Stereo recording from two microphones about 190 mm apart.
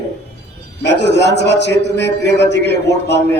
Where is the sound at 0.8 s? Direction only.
65° left (ahead or behind).